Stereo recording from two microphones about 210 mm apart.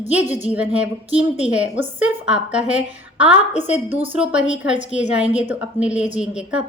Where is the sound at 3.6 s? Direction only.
35° left (ahead or behind).